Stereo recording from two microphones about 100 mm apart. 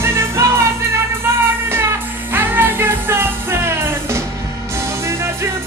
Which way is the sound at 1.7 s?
25° right (ahead or behind).